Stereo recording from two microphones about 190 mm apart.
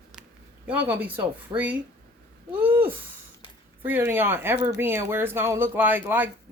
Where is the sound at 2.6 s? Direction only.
10° right (ahead or behind).